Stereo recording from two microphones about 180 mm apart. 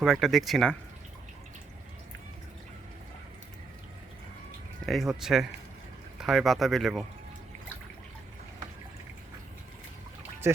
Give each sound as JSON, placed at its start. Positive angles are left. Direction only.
{"t": 0.0, "sound": "speech", "side_deg": 0}
{"t": 4.9, "sound": "speech", "side_deg": 0}
{"t": 10.5, "sound": "speech", "side_deg": -15}